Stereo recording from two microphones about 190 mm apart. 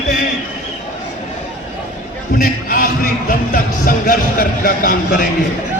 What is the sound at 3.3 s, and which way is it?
Music, 50° left (ahead or behind).